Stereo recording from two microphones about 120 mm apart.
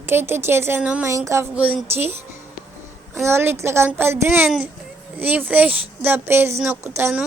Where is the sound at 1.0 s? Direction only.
25° right (ahead or behind).